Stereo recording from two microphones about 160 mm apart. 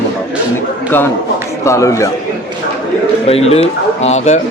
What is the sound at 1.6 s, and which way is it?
Speech, 20° left (ahead or behind).